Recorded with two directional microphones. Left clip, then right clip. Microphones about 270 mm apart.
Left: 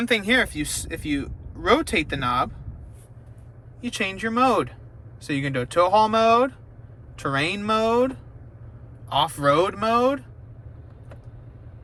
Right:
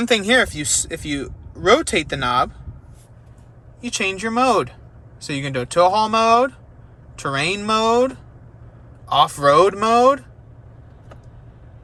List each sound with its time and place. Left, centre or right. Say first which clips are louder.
0.0 s speech: right 5 dB; centre
3.8 s speech: right 5 dB; centre